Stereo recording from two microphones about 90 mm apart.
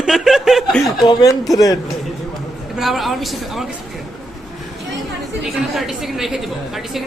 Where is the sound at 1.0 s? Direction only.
45° left (ahead or behind).